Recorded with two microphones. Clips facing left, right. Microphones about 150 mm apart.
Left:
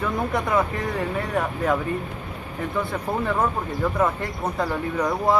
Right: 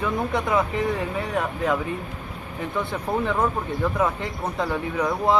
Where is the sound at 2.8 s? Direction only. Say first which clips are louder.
Right 2 dB; centre (ahead or behind).